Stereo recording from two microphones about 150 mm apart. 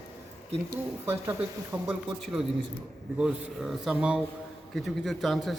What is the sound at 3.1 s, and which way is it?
Speech, 5° right (ahead or behind).